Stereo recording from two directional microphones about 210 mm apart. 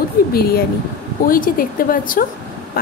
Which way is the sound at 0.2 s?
45° left (ahead or behind).